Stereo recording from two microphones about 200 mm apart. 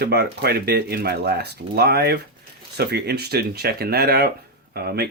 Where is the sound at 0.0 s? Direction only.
50° right (ahead or behind).